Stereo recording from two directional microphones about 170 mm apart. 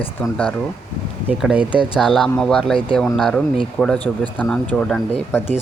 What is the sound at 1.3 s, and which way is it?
Speech, 10° right (ahead or behind).